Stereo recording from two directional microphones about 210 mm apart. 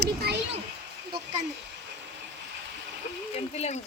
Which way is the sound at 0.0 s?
50° right (ahead or behind).